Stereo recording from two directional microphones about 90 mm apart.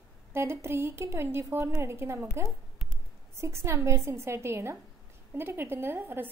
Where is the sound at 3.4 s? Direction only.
30° right (ahead or behind).